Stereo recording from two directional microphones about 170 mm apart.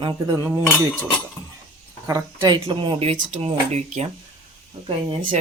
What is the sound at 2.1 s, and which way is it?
Speech, 25° right (ahead or behind).